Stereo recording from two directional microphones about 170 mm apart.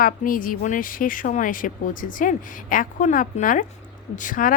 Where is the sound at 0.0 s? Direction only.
55° left (ahead or behind).